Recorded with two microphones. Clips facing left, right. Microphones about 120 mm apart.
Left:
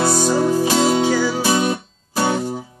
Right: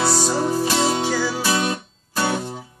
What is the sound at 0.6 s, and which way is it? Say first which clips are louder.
Music: left 4 dB; 10° left (ahead or behind).